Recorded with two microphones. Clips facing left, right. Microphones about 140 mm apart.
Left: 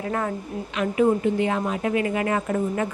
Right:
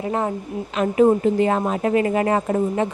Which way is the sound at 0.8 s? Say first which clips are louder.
Right 4 dB; 35° right (ahead or behind).